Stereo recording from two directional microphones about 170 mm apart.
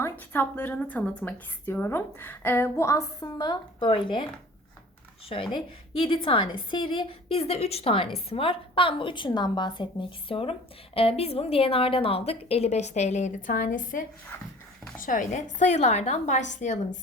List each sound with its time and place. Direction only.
0.0 s a woman's voice: 10° left (ahead or behind); by 4.3 s 30° left (ahead or behind)
5.3 s a woman's voice: 30° left (ahead or behind); by 17.0 s 45° left (ahead or behind)